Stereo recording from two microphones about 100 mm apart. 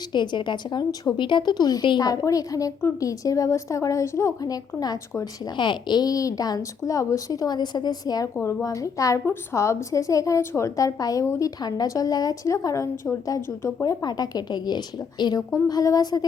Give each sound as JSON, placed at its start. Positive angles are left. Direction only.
{"t": 0.1, "sound": "a woman's voice", "side_deg": 50}
{"t": 1.1, "sound": "a woman's voice", "side_deg": 55}
{"t": 2.0, "sound": "a woman's voice", "side_deg": 35}